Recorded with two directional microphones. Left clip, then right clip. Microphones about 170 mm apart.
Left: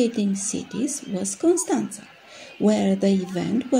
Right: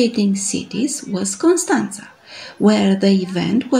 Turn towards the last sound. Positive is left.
turn(degrees=15)  # may be behind; listen again after turning